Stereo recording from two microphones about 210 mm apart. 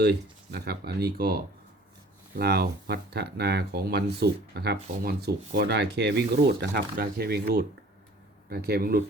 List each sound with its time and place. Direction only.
0.0 s speech: 50° right (ahead or behind)